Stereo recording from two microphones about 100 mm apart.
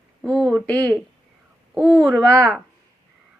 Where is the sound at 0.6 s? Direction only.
10° left (ahead or behind).